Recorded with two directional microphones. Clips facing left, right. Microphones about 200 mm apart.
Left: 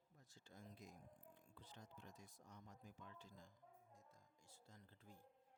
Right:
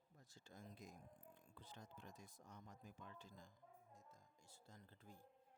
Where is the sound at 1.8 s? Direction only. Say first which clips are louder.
Right 1 dB; 50° right (ahead or behind).